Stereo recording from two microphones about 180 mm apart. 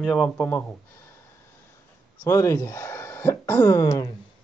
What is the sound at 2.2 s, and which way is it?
Speech, 15° left (ahead or behind).